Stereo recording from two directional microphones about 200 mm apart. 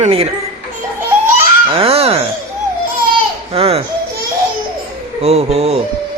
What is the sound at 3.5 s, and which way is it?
Speech, 30° right (ahead or behind).